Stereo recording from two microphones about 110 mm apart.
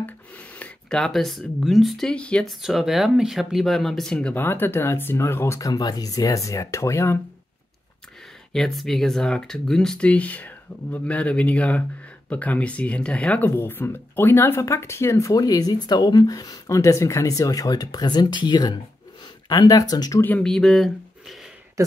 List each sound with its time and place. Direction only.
0.6 s speech: 5° left (ahead or behind)
4.4 s speech: 20° left (ahead or behind)
8.5 s speech: centre (ahead or behind); by 20.2 s 35° left (ahead or behind)
20.2 s speech: 15° left (ahead or behind)
20.4 s speech: 5° left (ahead or behind)
21.8 s speech: 30° right (ahead or behind)